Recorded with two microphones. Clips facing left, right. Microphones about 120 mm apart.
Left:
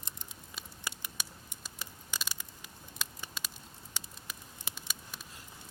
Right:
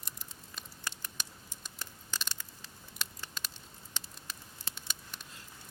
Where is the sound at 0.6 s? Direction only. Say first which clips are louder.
Left 1 dB; 10° left (ahead or behind).